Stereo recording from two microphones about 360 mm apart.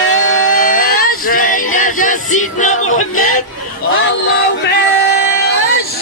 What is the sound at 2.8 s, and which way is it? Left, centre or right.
Music, left.